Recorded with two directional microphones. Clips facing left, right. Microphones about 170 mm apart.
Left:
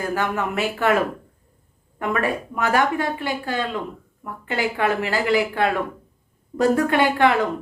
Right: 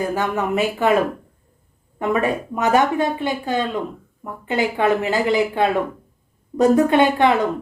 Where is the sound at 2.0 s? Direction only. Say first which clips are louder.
Right 3 dB; 20° right (ahead or behind).